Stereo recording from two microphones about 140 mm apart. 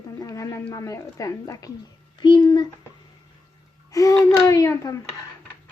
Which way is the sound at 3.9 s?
20° left (ahead or behind).